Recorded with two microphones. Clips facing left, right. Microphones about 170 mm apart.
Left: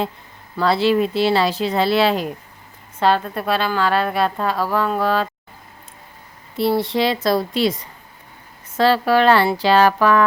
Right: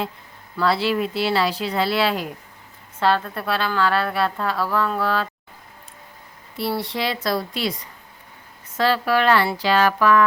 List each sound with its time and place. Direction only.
0.5 s a woman's voice: 25° left (ahead or behind)
6.6 s speech: 25° left (ahead or behind)